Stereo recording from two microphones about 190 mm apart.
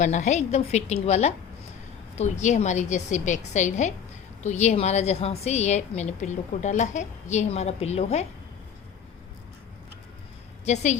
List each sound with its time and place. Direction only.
0.0 s a woman's voice: 40° left (ahead or behind)
10.7 s a woman's voice: 35° left (ahead or behind)